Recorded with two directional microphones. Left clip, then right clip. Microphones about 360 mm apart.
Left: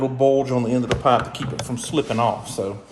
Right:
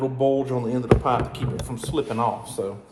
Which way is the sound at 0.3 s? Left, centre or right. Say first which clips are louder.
Left 4 dB; left.